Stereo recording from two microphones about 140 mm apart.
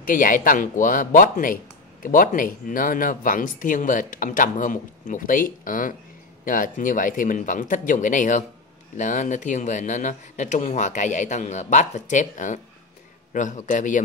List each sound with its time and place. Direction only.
0.0 s speech: 75° left (ahead or behind)